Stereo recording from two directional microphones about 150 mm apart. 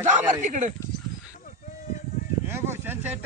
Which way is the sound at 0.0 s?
55° right (ahead or behind).